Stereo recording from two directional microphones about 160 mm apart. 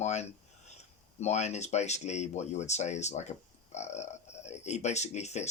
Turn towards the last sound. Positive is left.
turn(degrees=45)  # may be behind; listen again after turning